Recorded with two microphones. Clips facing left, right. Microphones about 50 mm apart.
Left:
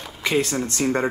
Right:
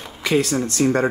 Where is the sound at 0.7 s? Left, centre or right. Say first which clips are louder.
Right 4 dB; left.